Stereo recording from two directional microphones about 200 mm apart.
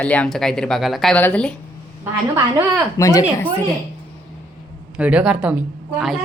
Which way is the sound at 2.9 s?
15° left (ahead or behind).